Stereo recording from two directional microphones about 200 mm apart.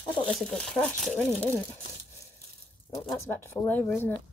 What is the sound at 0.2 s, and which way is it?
Speech, 5° left (ahead or behind).